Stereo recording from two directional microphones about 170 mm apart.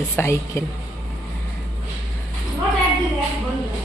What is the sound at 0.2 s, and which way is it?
Speech, 15° left (ahead or behind).